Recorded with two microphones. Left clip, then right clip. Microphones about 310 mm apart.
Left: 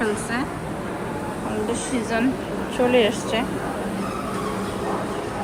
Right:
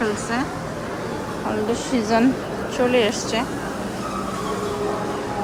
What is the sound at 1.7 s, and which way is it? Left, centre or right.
A woman's voice, centre.